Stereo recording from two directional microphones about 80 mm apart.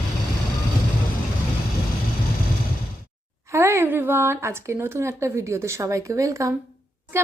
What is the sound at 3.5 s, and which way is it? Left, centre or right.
A woman's voice, right.